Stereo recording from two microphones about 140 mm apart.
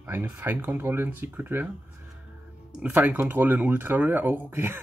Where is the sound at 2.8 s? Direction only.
10° right (ahead or behind).